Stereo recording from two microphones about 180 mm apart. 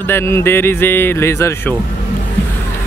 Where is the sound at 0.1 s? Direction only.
15° left (ahead or behind).